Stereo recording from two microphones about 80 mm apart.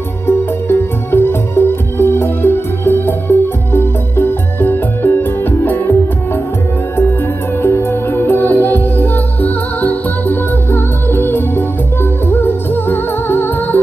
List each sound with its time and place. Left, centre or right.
0.3 s music: left
7.6 s music: left